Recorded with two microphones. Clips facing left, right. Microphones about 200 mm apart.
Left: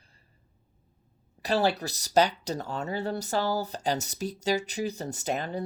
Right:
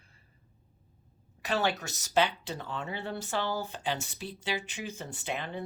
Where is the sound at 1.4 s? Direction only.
35° left (ahead or behind).